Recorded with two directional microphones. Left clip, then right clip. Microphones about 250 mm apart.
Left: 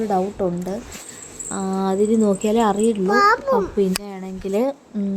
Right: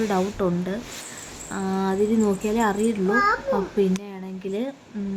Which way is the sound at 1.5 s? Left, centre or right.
Centre.